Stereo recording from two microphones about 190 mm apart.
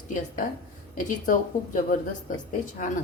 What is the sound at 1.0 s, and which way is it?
Speech, 45° left (ahead or behind).